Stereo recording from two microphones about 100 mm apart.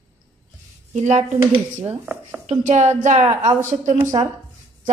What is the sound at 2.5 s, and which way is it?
Speech, 90° right.